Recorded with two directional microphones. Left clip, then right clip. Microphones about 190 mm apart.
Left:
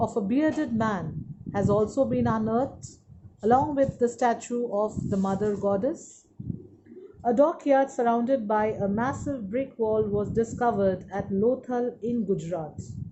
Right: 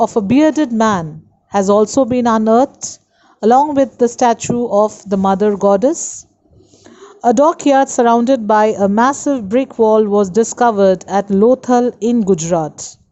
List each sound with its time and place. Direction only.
0.0 s a woman's voice: 45° right (ahead or behind)
7.2 s a woman's voice: 55° right (ahead or behind)